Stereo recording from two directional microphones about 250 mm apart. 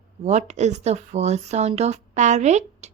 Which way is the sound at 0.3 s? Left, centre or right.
Right.